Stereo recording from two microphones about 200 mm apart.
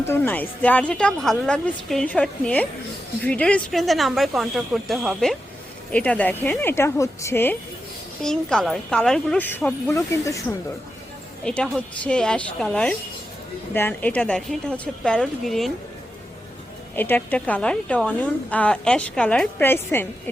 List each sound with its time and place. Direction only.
0.0 s a woman's voice: 10° left (ahead or behind)
11.4 s speech: 5° left (ahead or behind)
16.9 s a woman's voice: 10° left (ahead or behind)